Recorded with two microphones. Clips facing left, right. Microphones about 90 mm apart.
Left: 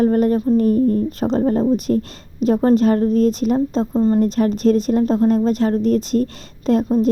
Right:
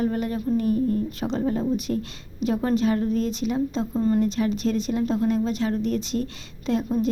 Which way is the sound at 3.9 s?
30° left (ahead or behind).